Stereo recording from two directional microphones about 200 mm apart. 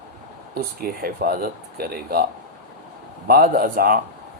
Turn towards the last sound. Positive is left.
turn(degrees=-45)  # may be behind; listen again after turning